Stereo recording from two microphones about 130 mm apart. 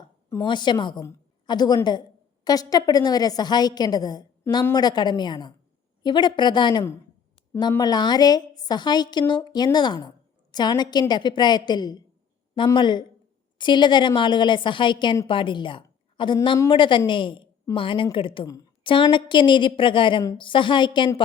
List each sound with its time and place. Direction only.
0.4 s a woman's voice: 35° left (ahead or behind)
18.4 s a woman's voice: 25° left (ahead or behind)
18.8 s a woman's voice: 40° left (ahead or behind)